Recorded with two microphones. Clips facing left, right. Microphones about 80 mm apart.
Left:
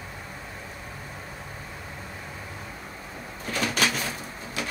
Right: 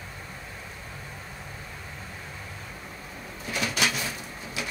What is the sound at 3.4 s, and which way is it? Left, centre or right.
Bird, left.